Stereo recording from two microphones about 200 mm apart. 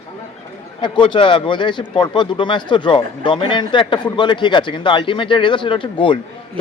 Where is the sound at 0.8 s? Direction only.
25° left (ahead or behind).